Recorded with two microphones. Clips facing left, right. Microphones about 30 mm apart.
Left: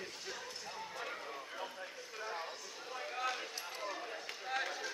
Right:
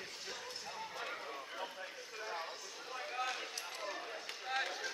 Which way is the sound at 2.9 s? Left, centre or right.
Centre.